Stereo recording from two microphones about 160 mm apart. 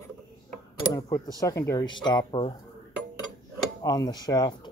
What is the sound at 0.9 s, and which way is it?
Speech, 25° left (ahead or behind).